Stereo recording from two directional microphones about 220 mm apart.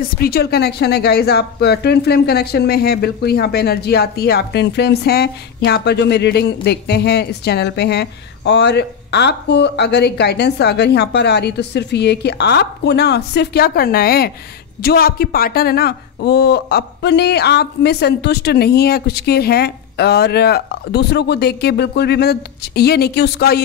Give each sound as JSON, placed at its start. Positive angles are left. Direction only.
{"t": 0.0, "sound": "speech", "side_deg": 45}